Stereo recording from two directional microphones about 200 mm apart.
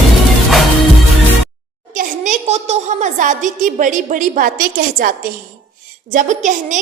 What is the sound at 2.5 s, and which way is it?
A woman's voice, 35° right (ahead or behind).